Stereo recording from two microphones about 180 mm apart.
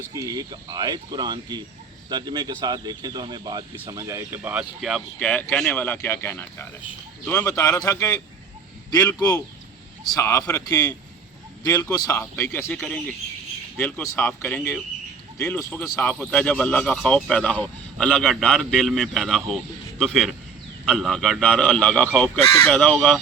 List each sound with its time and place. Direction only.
0.1 s speech: 20° right (ahead or behind)
4.8 s speech: centre (ahead or behind); by 8.1 s 20° left (ahead or behind)
9.1 s speech: 20° left (ahead or behind); by 23.2 s 5° left (ahead or behind)